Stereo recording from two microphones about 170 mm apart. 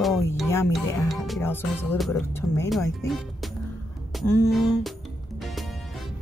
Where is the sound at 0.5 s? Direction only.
15° left (ahead or behind).